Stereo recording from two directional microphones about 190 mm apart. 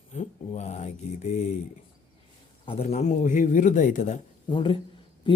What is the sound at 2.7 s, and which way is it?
A man's voice, 35° left (ahead or behind).